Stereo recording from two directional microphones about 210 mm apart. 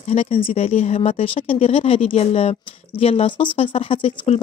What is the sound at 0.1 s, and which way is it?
Speech, 30° left (ahead or behind).